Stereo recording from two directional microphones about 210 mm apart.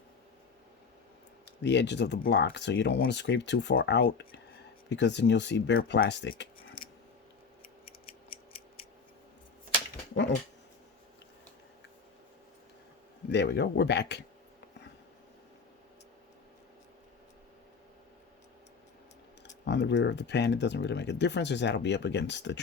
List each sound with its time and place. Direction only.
1.6 s speech: 55° left (ahead or behind)
13.2 s speech: 55° left (ahead or behind)
19.6 s speech: 55° left (ahead or behind)